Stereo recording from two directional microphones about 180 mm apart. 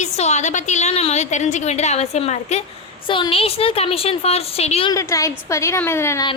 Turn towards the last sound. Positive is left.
turn(degrees=15)  # may be behind; listen again after turning